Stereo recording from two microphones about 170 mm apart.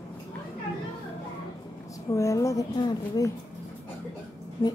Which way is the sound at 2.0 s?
20° left (ahead or behind).